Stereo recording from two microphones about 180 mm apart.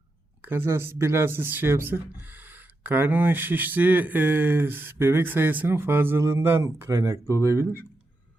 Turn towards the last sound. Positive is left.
turn(degrees=-15)  # may be behind; listen again after turning